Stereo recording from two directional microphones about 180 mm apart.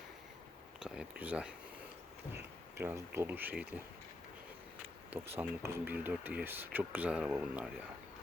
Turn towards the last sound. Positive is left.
turn(degrees=-5)  # may be behind; listen again after turning